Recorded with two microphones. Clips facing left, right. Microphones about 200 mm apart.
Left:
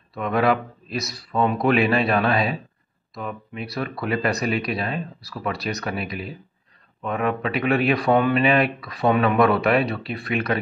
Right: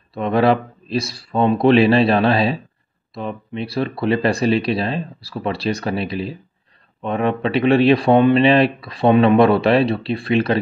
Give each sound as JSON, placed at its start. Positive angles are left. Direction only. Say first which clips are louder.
{"t": 0.1, "sound": "speech", "louder": "right 5 dB", "side_deg": -30}